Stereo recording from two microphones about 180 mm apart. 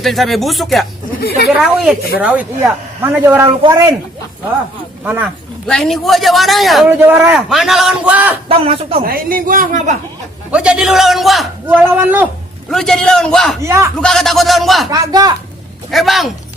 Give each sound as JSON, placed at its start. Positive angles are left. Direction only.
{"t": 0.0, "sound": "a man's voice", "side_deg": 0}
{"t": 5.0, "sound": "speech", "side_deg": -10}
{"t": 5.6, "sound": "a man's voice", "side_deg": 0}
{"t": 6.9, "sound": "a man's voice", "side_deg": -10}
{"t": 8.4, "sound": "a man's voice", "side_deg": -30}
{"t": 9.0, "sound": "speech", "side_deg": -55}
{"t": 10.5, "sound": "a man's voice", "side_deg": -5}
{"t": 12.7, "sound": "a man's voice", "side_deg": 0}
{"t": 13.7, "sound": "speech", "side_deg": -15}
{"t": 14.0, "sound": "a man's voice", "side_deg": 0}
{"t": 14.8, "sound": "speech", "side_deg": -20}
{"t": 15.9, "sound": "a man's voice", "side_deg": 0}